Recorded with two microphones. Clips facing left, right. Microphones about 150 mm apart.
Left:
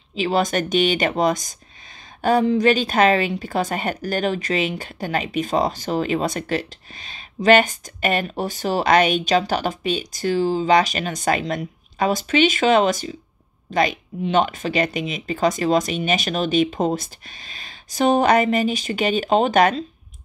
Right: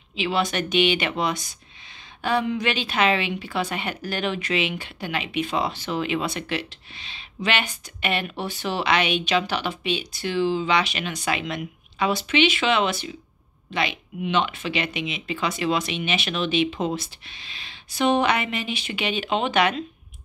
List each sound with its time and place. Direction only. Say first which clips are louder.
0.1 s speech: left 4 dB; 40° left (ahead or behind)